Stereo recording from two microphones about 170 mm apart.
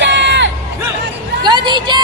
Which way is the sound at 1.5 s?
25° right (ahead or behind).